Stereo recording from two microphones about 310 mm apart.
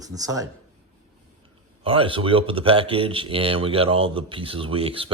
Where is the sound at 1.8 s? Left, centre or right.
Centre.